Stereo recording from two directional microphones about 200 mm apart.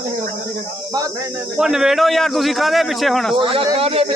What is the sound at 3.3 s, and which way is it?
Speech, 25° right (ahead or behind).